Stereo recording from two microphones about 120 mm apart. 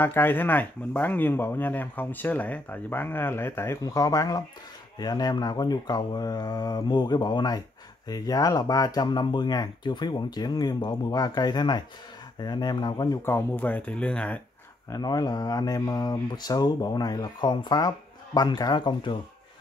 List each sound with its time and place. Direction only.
0.0 s speech: 15° left (ahead or behind); by 13.2 s 35° left (ahead or behind)
13.2 s speech: 20° left (ahead or behind)
14.9 s speech: 30° left (ahead or behind)